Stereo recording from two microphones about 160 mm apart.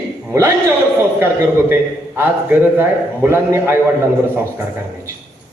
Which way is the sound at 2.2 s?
10° right (ahead or behind).